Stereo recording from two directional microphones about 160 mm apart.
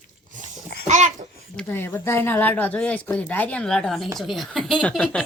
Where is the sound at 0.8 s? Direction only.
50° right (ahead or behind).